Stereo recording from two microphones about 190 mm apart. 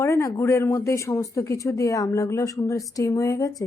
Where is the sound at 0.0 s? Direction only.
15° left (ahead or behind).